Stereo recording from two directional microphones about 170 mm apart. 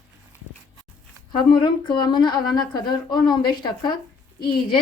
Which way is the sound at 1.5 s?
30° left (ahead or behind).